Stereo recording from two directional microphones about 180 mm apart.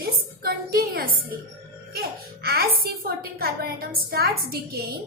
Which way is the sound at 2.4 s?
60° right (ahead or behind).